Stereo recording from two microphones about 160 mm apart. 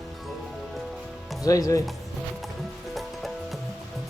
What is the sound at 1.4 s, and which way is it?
Speech, 20° left (ahead or behind).